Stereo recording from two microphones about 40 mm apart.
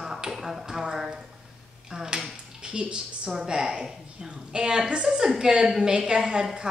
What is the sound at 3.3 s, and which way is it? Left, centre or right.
A woman's voice, centre.